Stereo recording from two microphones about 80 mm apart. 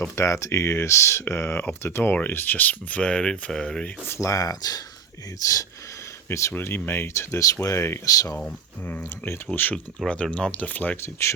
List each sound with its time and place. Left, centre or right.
0.2 s speech: left; by 3.8 s centre
3.8 s speech: left
6.2 s speech: left
6.5 s speech: left
8.4 s speech: centre
9.7 s speech: centre
11.0 s speech: left